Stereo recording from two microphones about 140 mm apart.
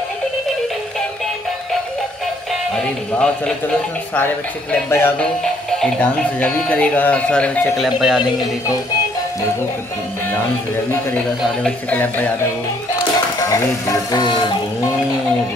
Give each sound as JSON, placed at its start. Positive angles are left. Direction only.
{"t": 2.7, "sound": "speech", "side_deg": 5}
{"t": 4.8, "sound": "speech", "side_deg": 20}
{"t": 5.2, "sound": "speech", "side_deg": 5}
{"t": 8.2, "sound": "speech", "side_deg": 30}
{"t": 11.6, "sound": "speech", "side_deg": 10}
{"t": 13.4, "sound": "speech", "side_deg": 25}